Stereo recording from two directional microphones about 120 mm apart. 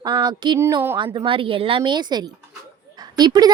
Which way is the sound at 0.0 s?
35° right (ahead or behind).